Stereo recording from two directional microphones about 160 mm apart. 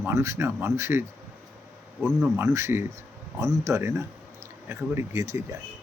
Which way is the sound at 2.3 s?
15° right (ahead or behind).